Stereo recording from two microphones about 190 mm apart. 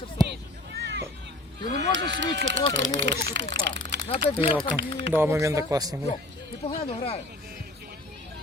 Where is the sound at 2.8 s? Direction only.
70° right (ahead or behind).